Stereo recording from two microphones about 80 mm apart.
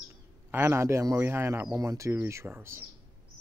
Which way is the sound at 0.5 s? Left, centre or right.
Right.